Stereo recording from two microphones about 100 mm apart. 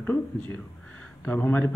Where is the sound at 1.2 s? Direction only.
20° left (ahead or behind).